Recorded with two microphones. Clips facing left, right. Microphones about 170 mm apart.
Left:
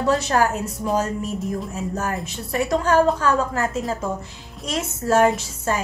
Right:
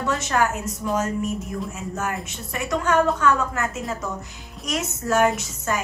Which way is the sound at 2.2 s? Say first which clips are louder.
Left 6 dB; 35° left (ahead or behind).